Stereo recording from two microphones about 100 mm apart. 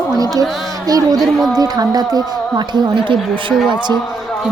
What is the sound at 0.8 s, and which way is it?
Speech, 40° right (ahead or behind).